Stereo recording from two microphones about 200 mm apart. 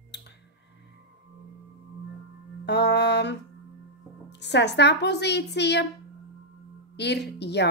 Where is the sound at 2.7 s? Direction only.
60° left (ahead or behind).